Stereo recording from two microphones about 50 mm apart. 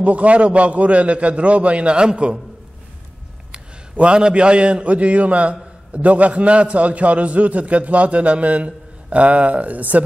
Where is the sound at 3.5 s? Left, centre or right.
Right.